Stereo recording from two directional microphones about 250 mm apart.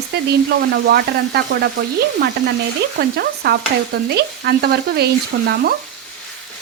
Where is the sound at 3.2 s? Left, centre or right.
Right.